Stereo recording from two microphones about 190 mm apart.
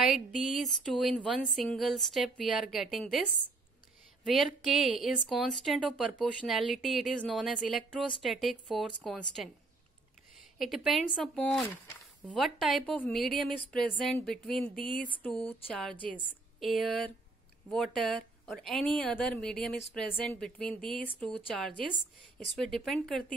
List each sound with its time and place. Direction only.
0.0 s speech: centre (ahead or behind)
10.6 s speech: centre (ahead or behind)
14.8 s a sound: 25° right (ahead or behind)
15.1 s speech: 10° left (ahead or behind)
22.6 s speech: centre (ahead or behind)